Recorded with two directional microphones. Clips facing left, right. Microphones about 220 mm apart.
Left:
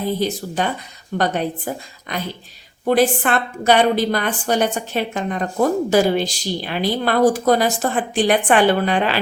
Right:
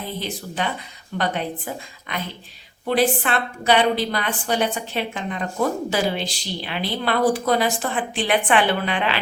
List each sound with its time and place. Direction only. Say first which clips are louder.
0.2 s a woman's voice: left 6 dB; 40° left (ahead or behind)